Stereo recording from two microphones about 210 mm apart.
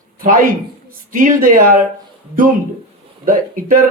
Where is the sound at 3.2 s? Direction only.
40° right (ahead or behind).